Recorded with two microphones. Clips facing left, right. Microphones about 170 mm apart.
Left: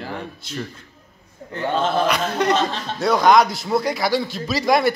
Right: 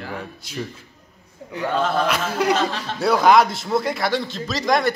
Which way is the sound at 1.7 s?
25° left (ahead or behind).